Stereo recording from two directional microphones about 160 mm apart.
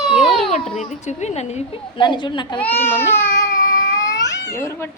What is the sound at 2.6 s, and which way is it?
Speech, 10° left (ahead or behind).